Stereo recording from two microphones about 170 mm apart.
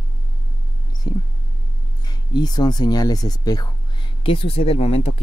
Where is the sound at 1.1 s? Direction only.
25° left (ahead or behind).